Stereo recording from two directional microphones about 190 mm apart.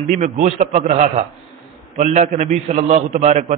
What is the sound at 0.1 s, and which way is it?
A man's voice, 40° right (ahead or behind).